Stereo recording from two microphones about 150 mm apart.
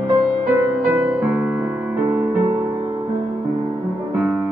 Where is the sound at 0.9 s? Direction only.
10° right (ahead or behind).